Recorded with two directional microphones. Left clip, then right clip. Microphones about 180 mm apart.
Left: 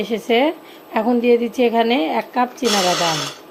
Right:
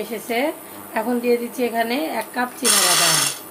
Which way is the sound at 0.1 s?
50° left (ahead or behind).